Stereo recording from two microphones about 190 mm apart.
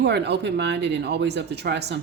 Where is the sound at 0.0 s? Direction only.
60° right (ahead or behind).